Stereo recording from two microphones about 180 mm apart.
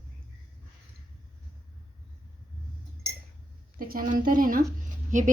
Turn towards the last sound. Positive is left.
turn(degrees=-45)  # may be behind; listen again after turning